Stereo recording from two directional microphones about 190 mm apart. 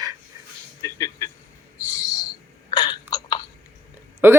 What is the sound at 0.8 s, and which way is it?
Speech, 15° left (ahead or behind).